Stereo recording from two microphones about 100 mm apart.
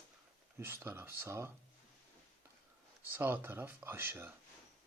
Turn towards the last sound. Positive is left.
turn(degrees=-25)  # may be behind; listen again after turning